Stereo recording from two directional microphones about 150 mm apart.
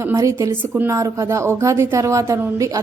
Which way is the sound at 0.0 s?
20° right (ahead or behind).